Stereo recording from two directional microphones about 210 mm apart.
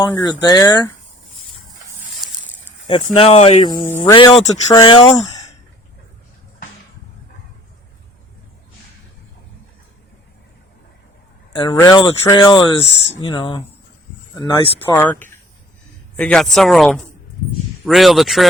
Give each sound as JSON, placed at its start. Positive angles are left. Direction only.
{"t": 0.0, "sound": "speech", "side_deg": 15}
{"t": 2.8, "sound": "speech", "side_deg": 30}
{"t": 11.5, "sound": "speech", "side_deg": 20}
{"t": 14.8, "sound": "speech", "side_deg": 10}